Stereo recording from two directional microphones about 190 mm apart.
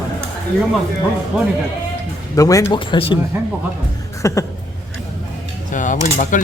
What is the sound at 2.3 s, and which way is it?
Speech, 15° left (ahead or behind).